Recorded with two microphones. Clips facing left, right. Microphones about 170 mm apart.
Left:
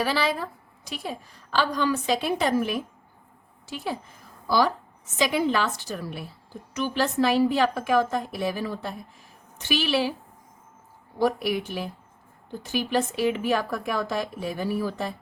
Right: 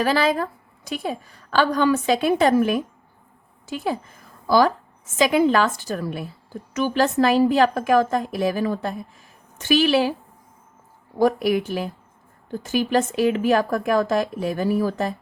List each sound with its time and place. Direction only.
0.0 s a woman's voice: 50° right (ahead or behind)
4.4 s a woman's voice: 50° right (ahead or behind)
11.2 s a woman's voice: 45° right (ahead or behind)